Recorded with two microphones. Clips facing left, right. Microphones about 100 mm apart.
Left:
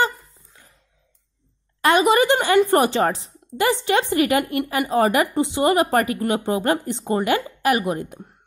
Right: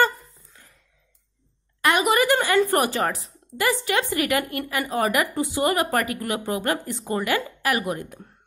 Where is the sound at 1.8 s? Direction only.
30° left (ahead or behind).